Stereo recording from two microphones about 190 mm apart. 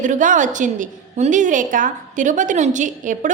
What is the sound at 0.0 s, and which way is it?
A woman's voice, 40° right (ahead or behind).